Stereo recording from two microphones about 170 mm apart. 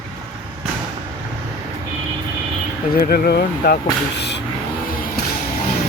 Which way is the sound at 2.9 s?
65° left (ahead or behind).